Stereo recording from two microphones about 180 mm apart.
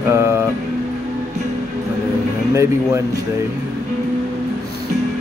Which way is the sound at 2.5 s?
15° right (ahead or behind).